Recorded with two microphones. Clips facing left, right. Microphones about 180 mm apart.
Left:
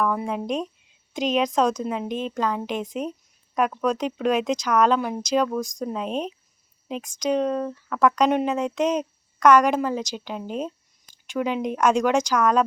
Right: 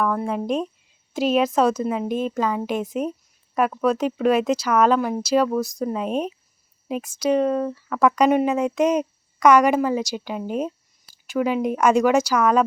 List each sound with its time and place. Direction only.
0.0 s a woman's voice: centre (ahead or behind)